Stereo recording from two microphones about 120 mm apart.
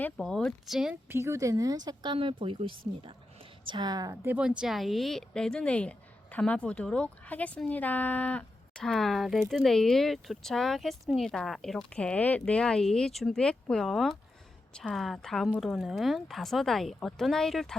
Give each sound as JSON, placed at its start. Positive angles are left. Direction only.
{"t": 0.2, "sound": "speech", "side_deg": 5}
{"t": 1.1, "sound": "a woman's voice", "side_deg": -25}
{"t": 2.1, "sound": "speech", "side_deg": -50}
{"t": 3.7, "sound": "a woman's voice", "side_deg": -35}
{"t": 4.4, "sound": "speech", "side_deg": -5}